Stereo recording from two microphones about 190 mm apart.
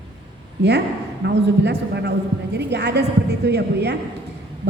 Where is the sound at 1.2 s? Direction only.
60° right (ahead or behind).